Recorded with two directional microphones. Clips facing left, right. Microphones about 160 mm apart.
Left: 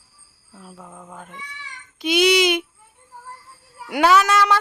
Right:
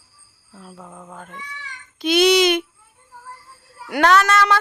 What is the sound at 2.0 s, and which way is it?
Speech, 10° left (ahead or behind).